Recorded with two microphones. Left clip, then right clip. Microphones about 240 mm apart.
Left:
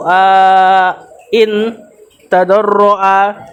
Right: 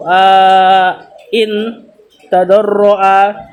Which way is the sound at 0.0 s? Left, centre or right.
Left.